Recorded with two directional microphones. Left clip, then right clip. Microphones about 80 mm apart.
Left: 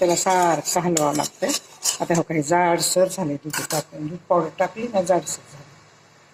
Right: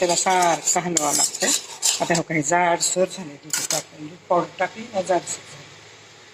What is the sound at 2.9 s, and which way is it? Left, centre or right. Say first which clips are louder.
Speech: left 3 dB; left.